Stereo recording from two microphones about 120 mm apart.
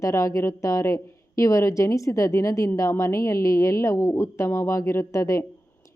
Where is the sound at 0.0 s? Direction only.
25° left (ahead or behind).